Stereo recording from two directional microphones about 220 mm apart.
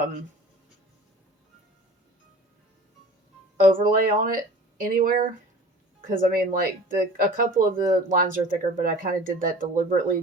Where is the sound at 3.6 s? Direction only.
35° right (ahead or behind).